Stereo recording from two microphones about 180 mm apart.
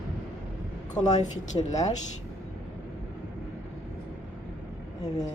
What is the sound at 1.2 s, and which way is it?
Speech, 40° left (ahead or behind).